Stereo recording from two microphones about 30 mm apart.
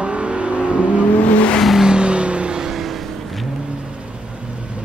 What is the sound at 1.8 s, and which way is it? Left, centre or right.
Car, right.